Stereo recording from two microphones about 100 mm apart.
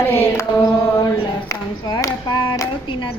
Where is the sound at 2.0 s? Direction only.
35° left (ahead or behind).